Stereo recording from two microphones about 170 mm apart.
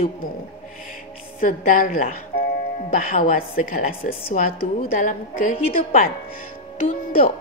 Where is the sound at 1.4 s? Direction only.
50° left (ahead or behind).